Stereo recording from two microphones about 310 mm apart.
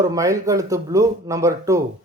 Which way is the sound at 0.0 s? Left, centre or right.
Centre.